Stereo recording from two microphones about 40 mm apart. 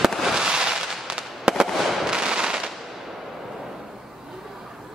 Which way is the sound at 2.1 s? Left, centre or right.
Centre.